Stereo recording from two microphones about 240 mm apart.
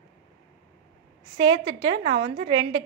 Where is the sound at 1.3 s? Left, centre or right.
Centre.